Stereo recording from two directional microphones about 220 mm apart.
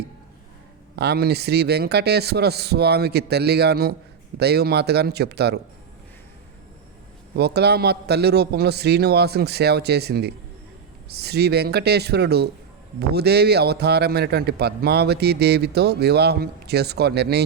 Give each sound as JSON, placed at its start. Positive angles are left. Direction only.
{"t": 0.9, "sound": "a man's voice", "side_deg": -45}
{"t": 7.3, "sound": "a man's voice", "side_deg": -45}